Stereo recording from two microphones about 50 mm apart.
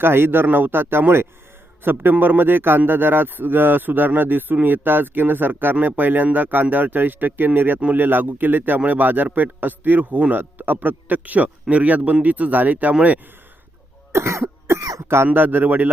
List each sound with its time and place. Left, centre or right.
0.0 s a man's voice: right
14.1 s cough: right
15.3 s a man's voice: right